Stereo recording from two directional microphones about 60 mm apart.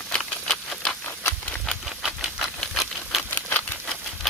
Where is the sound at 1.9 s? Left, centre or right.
Centre.